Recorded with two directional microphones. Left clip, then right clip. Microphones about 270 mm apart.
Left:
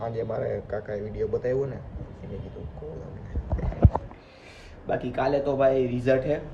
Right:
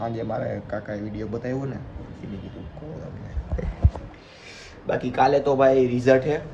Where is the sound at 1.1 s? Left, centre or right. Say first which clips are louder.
Left 7 dB; left.